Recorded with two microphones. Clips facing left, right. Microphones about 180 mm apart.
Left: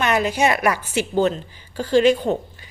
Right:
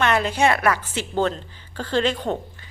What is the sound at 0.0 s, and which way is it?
A woman's voice, 10° left (ahead or behind).